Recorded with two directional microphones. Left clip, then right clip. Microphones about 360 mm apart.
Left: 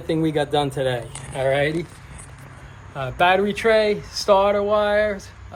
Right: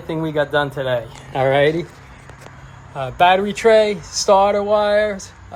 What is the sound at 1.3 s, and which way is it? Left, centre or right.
Speech, centre.